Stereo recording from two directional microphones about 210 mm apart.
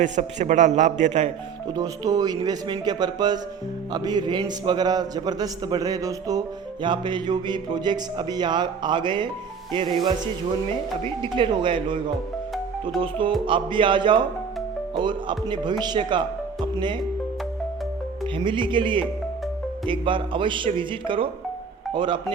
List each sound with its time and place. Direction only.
0.0 s a man's voice: 35° right (ahead or behind)
1.7 s speech: 20° right (ahead or behind)
11.2 s speech: 25° right (ahead or behind)
18.3 s speech: 25° right (ahead or behind)